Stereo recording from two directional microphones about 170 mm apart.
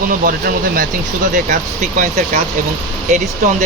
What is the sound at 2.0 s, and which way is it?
Speech, 45° right (ahead or behind).